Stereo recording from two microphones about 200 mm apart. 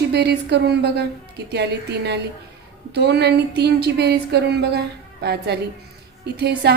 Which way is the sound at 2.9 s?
55° right (ahead or behind).